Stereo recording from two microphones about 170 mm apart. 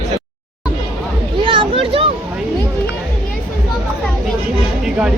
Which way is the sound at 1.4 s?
30° right (ahead or behind).